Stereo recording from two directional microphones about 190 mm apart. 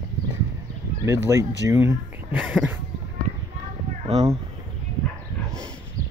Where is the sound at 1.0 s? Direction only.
15° right (ahead or behind).